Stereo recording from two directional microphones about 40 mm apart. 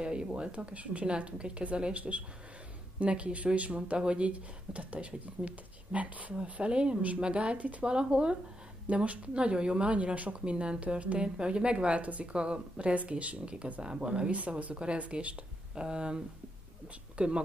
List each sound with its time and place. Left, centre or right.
0.0 s a woman's voice: right
8.8 s a woman's voice: right
14.3 s speech: right
15.7 s a woman's voice: right
17.2 s speech: right